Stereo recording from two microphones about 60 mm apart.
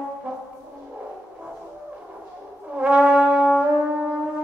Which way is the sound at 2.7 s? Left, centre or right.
Centre.